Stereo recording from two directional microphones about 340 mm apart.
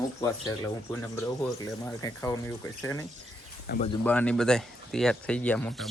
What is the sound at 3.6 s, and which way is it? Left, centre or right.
Speech, left.